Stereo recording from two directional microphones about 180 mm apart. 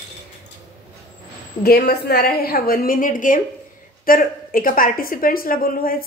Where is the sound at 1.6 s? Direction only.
60° left (ahead or behind).